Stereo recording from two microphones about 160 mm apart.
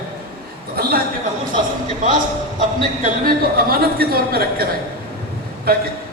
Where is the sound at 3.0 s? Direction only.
65° right (ahead or behind).